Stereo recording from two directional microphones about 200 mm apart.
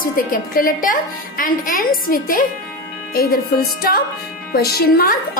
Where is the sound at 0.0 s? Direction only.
45° left (ahead or behind).